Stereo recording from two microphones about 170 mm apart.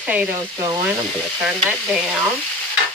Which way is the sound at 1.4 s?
5° right (ahead or behind).